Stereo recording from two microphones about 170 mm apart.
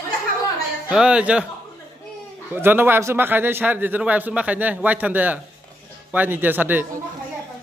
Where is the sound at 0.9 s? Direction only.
5° right (ahead or behind).